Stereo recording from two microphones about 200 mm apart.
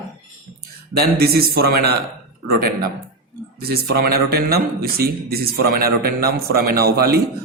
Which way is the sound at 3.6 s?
50° right (ahead or behind).